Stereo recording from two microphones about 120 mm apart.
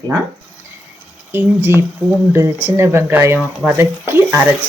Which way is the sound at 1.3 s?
15° right (ahead or behind).